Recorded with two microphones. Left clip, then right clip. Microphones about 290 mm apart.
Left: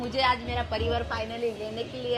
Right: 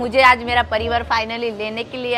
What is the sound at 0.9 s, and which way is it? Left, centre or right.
Speech, right.